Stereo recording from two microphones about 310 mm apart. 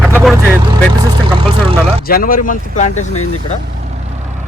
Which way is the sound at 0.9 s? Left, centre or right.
Centre.